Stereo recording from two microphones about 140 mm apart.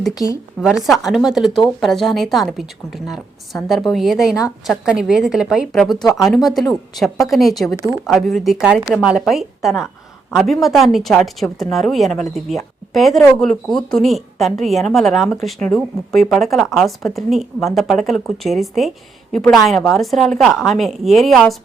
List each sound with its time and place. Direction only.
0.1 s a woman's voice: 25° left (ahead or behind)
0.9 s a woman's voice: centre (ahead or behind)